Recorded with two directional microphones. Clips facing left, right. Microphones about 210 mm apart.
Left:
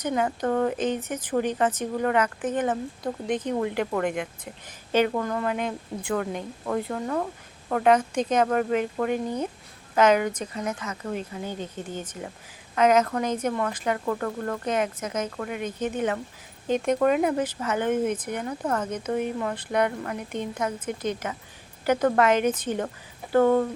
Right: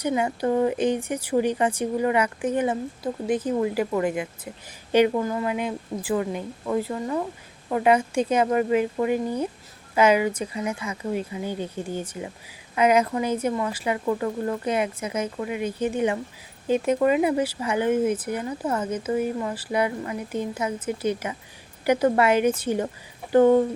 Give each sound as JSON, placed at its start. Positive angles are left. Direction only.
{"t": 0.0, "sound": "speech", "side_deg": -10}